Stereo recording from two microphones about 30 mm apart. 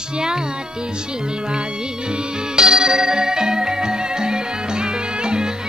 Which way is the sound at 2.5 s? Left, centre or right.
Right.